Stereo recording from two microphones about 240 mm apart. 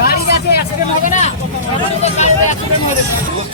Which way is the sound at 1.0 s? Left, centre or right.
Left.